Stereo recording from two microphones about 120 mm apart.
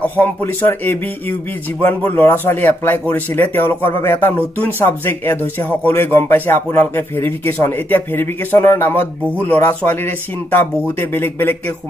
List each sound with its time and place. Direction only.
0.2 s speech: 20° left (ahead or behind)